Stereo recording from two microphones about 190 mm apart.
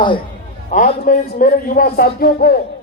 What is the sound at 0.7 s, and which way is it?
A man's voice, 45° left (ahead or behind).